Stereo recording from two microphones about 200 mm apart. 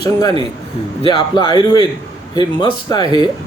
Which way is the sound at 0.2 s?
20° left (ahead or behind).